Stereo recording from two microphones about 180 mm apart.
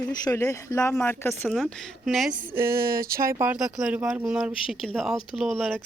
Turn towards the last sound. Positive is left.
turn(degrees=0)  # may be behind; listen again after turning